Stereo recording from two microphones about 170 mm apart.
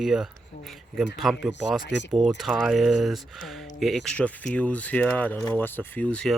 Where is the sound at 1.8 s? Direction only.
90° left.